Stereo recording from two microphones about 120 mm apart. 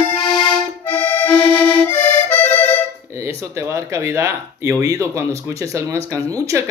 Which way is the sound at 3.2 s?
25° right (ahead or behind).